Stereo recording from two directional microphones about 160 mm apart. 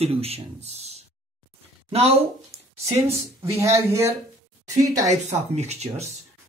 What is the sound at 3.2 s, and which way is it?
Speech, 20° right (ahead or behind).